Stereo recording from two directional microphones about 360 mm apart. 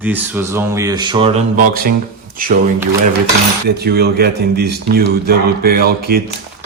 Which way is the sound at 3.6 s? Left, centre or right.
Right.